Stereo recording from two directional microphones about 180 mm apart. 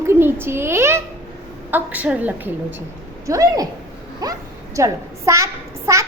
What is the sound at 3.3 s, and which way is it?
A child's voice, 20° right (ahead or behind).